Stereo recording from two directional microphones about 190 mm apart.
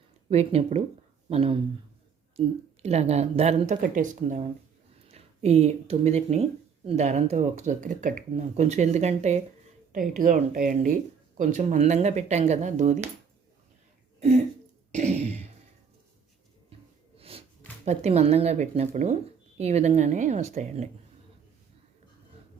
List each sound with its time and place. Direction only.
0.3 s speech: 35° right (ahead or behind)
2.8 s speech: 35° right (ahead or behind)
9.9 s speech: 45° right (ahead or behind)
14.2 s a sound: 35° right (ahead or behind)
17.2 s a sound: 30° right (ahead or behind)
17.8 s speech: 35° right (ahead or behind)